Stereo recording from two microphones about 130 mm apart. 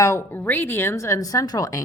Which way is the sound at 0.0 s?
20° left (ahead or behind).